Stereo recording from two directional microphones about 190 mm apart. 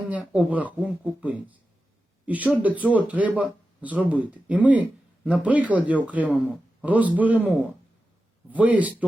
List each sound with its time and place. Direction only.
0.3 s speech: 5° right (ahead or behind)